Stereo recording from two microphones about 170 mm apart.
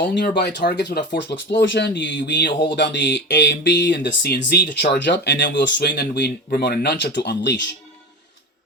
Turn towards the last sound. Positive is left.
turn(degrees=90)